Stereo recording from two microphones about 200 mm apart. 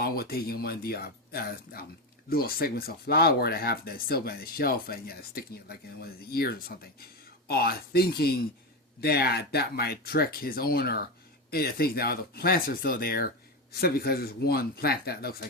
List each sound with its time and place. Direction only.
0.0 s speech: 50° left (ahead or behind)